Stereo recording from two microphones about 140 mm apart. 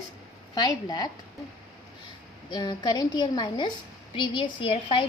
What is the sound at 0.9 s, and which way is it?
Speech, 30° left (ahead or behind).